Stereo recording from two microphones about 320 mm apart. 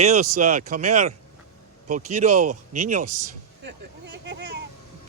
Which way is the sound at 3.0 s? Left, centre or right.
Right.